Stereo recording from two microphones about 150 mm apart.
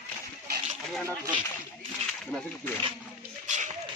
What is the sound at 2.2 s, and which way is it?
Speech, 5° left (ahead or behind).